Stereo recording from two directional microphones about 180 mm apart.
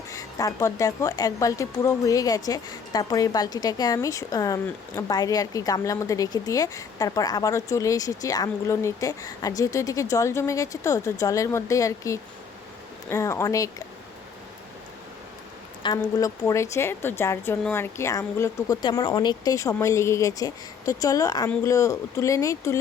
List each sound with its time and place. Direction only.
0.1 s speech: 20° left (ahead or behind)
15.8 s speech: 20° left (ahead or behind)